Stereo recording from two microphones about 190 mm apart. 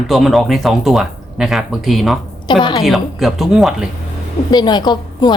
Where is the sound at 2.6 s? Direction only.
20° left (ahead or behind).